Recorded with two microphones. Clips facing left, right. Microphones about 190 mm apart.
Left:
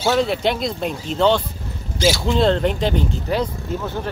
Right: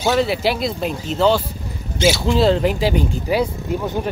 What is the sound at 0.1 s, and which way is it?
Speech, 5° right (ahead or behind).